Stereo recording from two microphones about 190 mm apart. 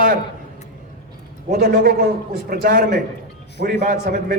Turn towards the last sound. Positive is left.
turn(degrees=-45)  # may be behind; listen again after turning